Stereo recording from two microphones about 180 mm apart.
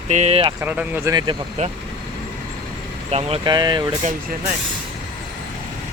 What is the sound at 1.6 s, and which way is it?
Speech, 40° right (ahead or behind).